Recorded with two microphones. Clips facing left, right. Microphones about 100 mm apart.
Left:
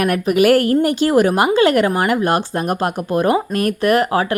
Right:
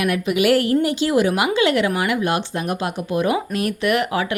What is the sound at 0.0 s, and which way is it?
Speech, 45° left (ahead or behind).